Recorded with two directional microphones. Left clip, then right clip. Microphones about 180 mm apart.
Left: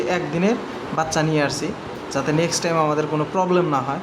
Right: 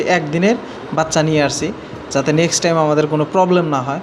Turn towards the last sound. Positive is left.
turn(degrees=-20)  # may be behind; listen again after turning